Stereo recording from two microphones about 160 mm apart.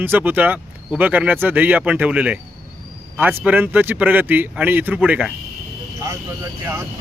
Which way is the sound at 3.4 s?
10° right (ahead or behind).